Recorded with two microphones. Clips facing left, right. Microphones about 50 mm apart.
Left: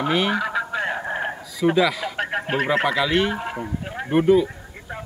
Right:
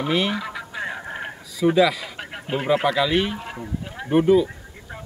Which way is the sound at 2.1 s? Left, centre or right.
Left.